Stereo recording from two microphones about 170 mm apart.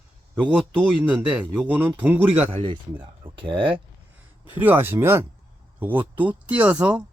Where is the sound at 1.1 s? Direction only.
10° right (ahead or behind).